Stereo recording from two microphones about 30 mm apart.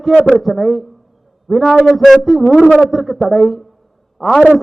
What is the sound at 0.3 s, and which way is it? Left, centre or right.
A man's voice, centre.